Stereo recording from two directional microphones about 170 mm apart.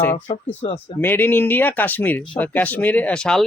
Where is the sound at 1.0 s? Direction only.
10° left (ahead or behind).